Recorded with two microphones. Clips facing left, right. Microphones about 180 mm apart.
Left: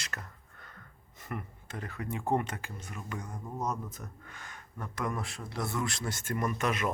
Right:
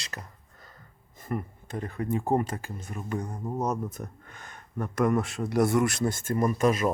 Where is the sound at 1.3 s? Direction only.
40° right (ahead or behind).